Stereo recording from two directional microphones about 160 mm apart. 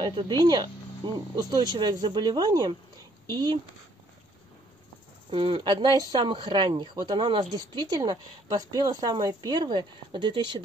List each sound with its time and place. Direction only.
0.0 s speech: 25° right (ahead or behind)
5.3 s speech: 30° right (ahead or behind)